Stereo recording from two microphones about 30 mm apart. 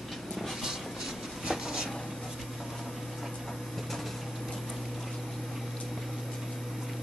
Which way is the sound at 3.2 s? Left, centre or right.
Centre.